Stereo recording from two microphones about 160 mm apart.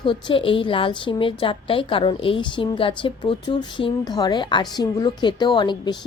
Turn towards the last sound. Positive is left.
turn(degrees=30)  # may be behind; listen again after turning